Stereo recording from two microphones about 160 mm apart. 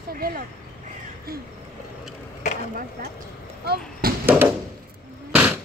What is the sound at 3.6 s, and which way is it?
Basketball bounce, 75° right (ahead or behind).